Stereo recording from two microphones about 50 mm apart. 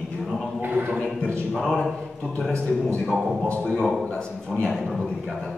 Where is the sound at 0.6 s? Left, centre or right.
Right.